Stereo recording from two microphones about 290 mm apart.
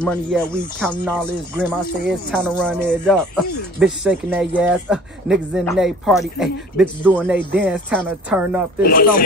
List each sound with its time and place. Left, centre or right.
0.0 s speech: centre
8.8 s speech: left